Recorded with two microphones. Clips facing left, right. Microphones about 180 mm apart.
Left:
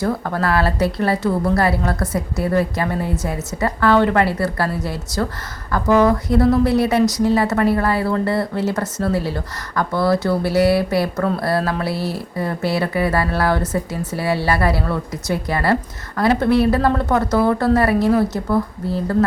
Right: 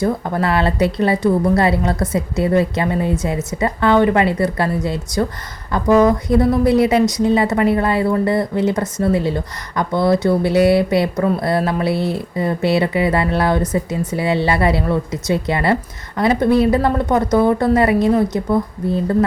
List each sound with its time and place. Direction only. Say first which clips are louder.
0.0 s a woman's voice: right 2 dB; 20° right (ahead or behind)